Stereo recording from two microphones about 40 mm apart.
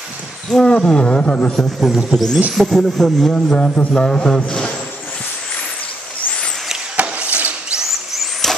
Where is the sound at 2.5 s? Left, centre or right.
Centre.